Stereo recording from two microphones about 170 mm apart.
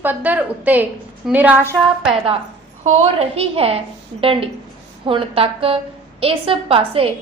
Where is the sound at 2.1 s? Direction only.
35° right (ahead or behind).